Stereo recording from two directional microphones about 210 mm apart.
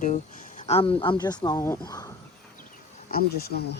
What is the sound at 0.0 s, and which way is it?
Speech, 35° left (ahead or behind).